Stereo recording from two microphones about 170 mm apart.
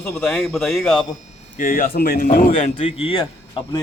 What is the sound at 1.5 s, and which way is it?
Speech, 55° left (ahead or behind).